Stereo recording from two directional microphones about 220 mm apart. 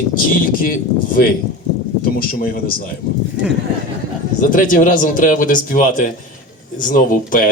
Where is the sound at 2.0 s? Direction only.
40° left (ahead or behind).